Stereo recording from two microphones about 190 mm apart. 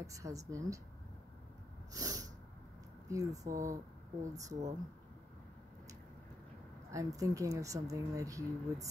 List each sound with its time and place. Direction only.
0.0 s speech: 15° right (ahead or behind)
2.0 s snort: 20° right (ahead or behind)
3.1 s speech: 15° right (ahead or behind)
6.9 s speech: 15° right (ahead or behind)